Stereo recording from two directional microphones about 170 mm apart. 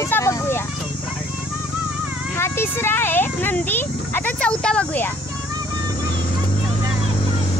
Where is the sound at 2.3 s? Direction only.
15° left (ahead or behind).